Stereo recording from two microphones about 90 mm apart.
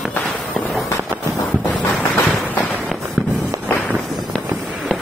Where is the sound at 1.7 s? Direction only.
20° left (ahead or behind).